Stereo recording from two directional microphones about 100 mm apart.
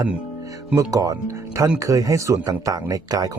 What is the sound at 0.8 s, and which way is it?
Speech, 35° right (ahead or behind).